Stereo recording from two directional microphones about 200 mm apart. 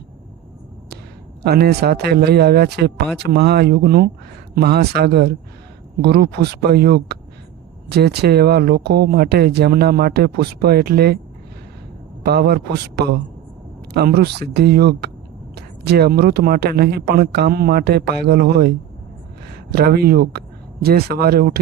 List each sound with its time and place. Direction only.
1.5 s speech: 55° right (ahead or behind)
12.2 s speech: 55° right (ahead or behind)
19.7 s speech: 50° right (ahead or behind)